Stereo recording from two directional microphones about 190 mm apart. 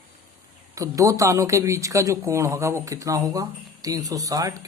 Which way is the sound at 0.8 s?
15° right (ahead or behind).